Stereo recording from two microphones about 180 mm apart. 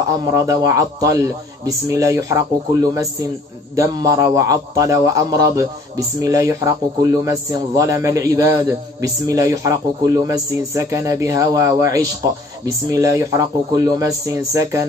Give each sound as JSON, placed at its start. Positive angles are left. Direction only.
{"t": 0.2, "sound": "a man's voice", "side_deg": -20}